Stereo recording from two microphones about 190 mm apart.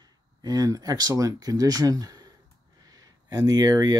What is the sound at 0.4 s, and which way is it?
Speech, 20° right (ahead or behind).